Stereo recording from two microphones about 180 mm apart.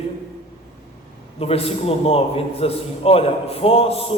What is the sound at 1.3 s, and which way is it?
A man's voice, 35° left (ahead or behind).